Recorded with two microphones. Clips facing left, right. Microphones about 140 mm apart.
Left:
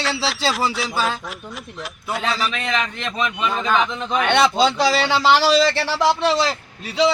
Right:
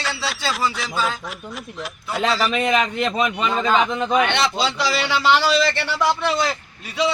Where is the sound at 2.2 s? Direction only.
65° right (ahead or behind).